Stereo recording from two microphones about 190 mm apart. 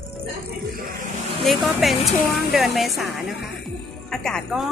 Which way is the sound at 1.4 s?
Centre (ahead or behind).